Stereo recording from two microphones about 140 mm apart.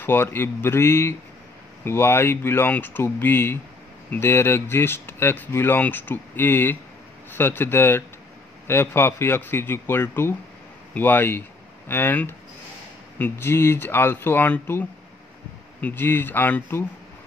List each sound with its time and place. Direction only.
0.0 s speech: 15° left (ahead or behind)